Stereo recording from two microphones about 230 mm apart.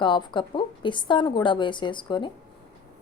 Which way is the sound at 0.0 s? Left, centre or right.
Left.